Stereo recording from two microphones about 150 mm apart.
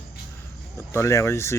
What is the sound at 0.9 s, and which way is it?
Speech, 20° left (ahead or behind).